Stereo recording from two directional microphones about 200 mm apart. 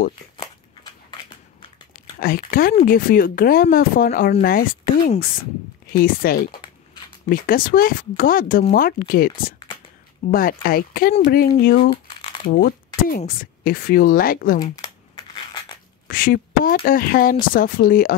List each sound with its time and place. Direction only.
2.1 s speech: 45° left (ahead or behind)
12.2 s crumpling: 25° left (ahead or behind)
12.4 s speech: 45° left (ahead or behind)
14.6 s crumpling: 20° left (ahead or behind)
16.1 s speech: 45° left (ahead or behind)